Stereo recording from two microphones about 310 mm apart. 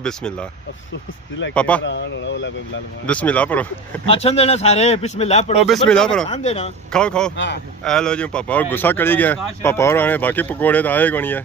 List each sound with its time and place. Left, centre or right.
0.0 s speech: centre
1.5 s speech: centre
1.8 s speech: left
3.1 s speech: centre
4.1 s speech: centre
5.6 s speech: centre
6.2 s speech: left
6.9 s speech: centre
7.3 s speech: left
7.9 s speech: centre